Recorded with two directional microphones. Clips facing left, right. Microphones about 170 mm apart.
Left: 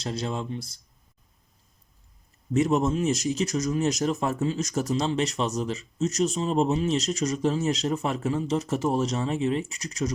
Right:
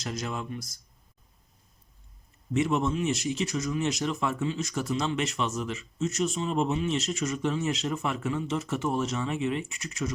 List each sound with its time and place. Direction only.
0.0 s speech: 30° left (ahead or behind)
2.5 s speech: 40° left (ahead or behind)